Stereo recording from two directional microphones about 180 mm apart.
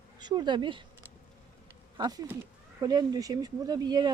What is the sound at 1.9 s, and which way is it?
Speech, 20° right (ahead or behind).